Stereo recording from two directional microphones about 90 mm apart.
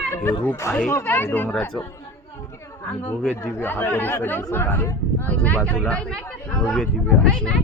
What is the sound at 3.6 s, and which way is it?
Speech, 20° left (ahead or behind).